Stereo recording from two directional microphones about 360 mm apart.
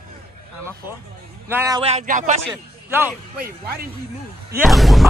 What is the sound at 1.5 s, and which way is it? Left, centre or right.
Speech, centre.